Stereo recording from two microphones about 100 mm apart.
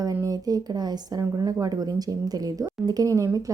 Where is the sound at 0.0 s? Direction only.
35° right (ahead or behind).